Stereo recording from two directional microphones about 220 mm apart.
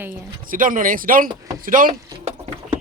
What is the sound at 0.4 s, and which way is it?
Speech, 40° right (ahead or behind).